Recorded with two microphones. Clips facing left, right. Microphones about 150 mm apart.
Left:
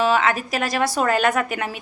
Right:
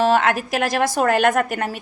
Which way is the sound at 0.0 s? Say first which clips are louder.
Right 2 dB; 55° right (ahead or behind).